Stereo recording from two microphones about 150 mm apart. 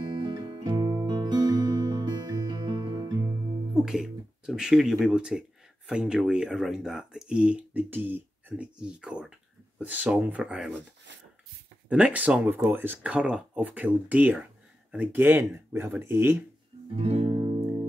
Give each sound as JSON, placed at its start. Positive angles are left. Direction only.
{"t": 0.0, "sound": "music", "side_deg": -30}
{"t": 3.7, "sound": "speech", "side_deg": -5}
{"t": 11.9, "sound": "speech", "side_deg": -10}
{"t": 16.9, "sound": "music", "side_deg": -40}